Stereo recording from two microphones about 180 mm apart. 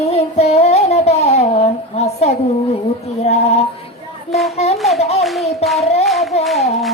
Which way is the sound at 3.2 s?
35° left (ahead or behind).